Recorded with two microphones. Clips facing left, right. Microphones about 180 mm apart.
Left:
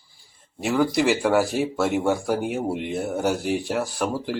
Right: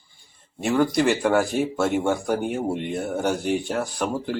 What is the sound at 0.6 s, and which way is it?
A man's voice, 5° left (ahead or behind).